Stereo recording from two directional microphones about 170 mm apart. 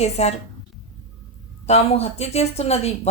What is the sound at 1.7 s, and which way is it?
A woman's voice, 35° left (ahead or behind).